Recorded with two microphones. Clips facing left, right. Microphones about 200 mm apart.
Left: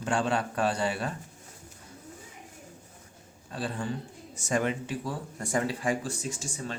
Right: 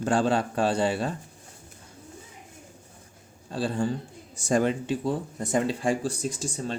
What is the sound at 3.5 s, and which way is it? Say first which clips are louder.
A man's voice: right 6 dB; 30° right (ahead or behind).